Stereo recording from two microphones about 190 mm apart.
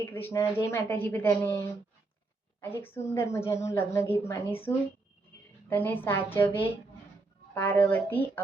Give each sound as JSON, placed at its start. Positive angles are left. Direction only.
{"t": 0.0, "sound": "a woman's voice", "side_deg": 10}
{"t": 5.6, "sound": "a woman's voice", "side_deg": 10}